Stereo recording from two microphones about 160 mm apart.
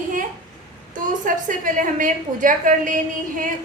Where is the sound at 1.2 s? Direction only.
55° right (ahead or behind).